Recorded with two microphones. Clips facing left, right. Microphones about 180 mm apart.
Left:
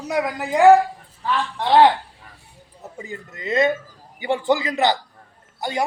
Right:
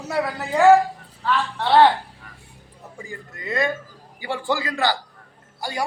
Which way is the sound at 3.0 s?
20° left (ahead or behind).